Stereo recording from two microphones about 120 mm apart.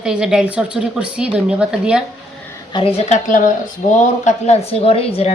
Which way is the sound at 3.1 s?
90° left.